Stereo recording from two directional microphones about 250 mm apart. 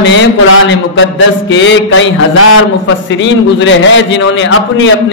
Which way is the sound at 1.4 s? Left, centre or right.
Left.